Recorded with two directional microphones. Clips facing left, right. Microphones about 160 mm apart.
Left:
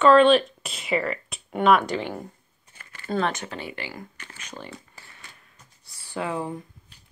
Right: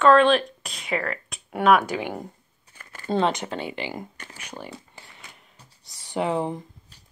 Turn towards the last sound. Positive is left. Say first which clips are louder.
# right 4 dB
turn(degrees=-25)  # may be behind; listen again after turning